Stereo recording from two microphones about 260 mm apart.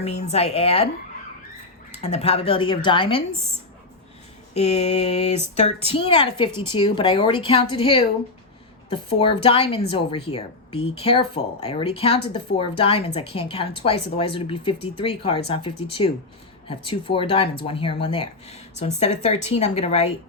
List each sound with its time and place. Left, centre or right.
0.0 s a woman's voice: left
2.0 s a woman's voice: left
4.5 s a woman's voice: left